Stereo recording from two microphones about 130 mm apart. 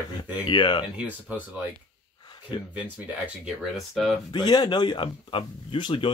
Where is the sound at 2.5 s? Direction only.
40° left (ahead or behind).